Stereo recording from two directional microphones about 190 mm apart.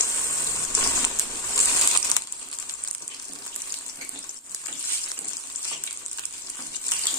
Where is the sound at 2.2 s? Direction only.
20° left (ahead or behind).